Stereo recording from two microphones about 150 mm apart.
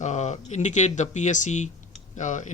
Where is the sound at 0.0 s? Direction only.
50° left (ahead or behind).